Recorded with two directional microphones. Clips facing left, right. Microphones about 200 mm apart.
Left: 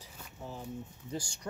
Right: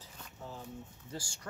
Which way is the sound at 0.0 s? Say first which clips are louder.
Left 2 dB; 15° left (ahead or behind).